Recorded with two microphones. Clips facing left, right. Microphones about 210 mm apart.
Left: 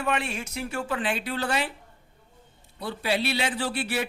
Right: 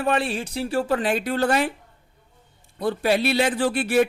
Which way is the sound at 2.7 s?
50° right (ahead or behind).